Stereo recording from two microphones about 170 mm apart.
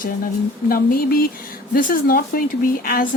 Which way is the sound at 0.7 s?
60° left (ahead or behind).